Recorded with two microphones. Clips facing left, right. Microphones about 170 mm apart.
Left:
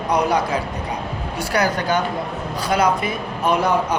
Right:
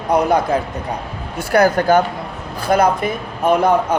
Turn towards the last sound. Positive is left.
turn(degrees=-50)  # may be behind; listen again after turning